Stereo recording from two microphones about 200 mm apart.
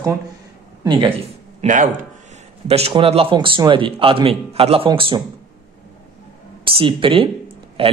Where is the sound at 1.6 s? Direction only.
40° right (ahead or behind).